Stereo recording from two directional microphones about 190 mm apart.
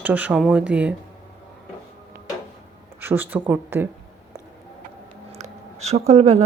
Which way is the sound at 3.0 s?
10° right (ahead or behind).